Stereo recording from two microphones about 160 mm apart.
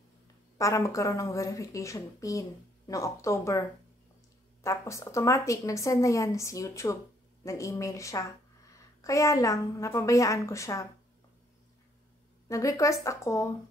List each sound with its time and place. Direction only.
0.6 s a woman's voice: 20° left (ahead or behind)
4.6 s a woman's voice: 20° left (ahead or behind)
12.4 s a woman's voice: 20° left (ahead or behind)